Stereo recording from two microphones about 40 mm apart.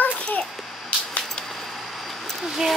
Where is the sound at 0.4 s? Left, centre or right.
Left.